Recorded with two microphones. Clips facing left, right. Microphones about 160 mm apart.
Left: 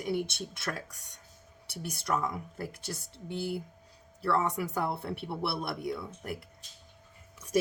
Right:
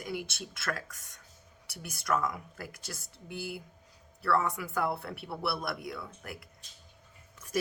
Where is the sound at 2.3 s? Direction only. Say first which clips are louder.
Left 2 dB; 30° left (ahead or behind).